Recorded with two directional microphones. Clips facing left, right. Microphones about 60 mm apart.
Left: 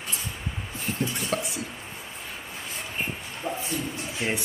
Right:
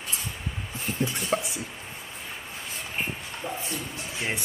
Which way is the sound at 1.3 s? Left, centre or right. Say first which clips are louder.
Right 3 dB; centre.